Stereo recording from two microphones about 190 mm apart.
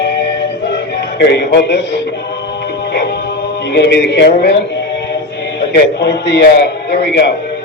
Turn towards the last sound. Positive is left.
turn(degrees=65)  # may be behind; listen again after turning